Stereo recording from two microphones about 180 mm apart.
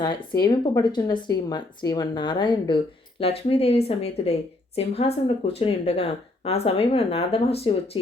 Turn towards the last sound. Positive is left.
turn(degrees=35)  # may be behind; listen again after turning